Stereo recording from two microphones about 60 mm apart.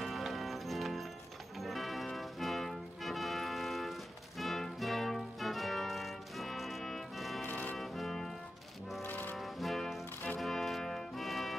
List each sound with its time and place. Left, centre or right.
0.0 s music: centre
7.4 s music: left
7.7 s music: centre
9.0 s brass instrument: left
9.4 s brass instrument: centre
10.4 s music: centre